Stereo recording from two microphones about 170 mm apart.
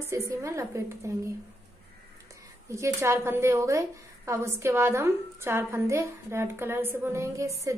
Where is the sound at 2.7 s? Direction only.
15° right (ahead or behind).